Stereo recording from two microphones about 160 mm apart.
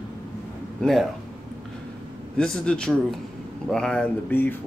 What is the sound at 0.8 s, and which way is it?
Speech, centre (ahead or behind).